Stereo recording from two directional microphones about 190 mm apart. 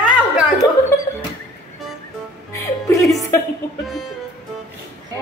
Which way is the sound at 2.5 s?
15° left (ahead or behind).